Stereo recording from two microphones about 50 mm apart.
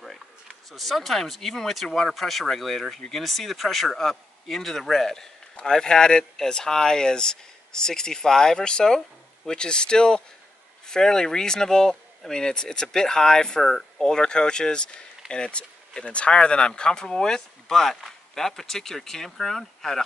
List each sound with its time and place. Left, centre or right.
0.7 s speech: centre